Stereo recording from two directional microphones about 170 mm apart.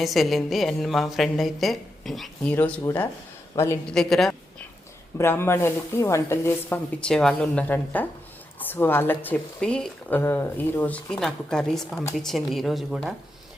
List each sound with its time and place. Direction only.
0.0 s a woman's voice: centre (ahead or behind)
3.9 s a woman's voice: 5° left (ahead or behind)
5.1 s a woman's voice: 15° left (ahead or behind)